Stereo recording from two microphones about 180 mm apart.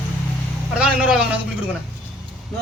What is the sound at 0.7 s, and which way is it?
Speech, 5° right (ahead or behind).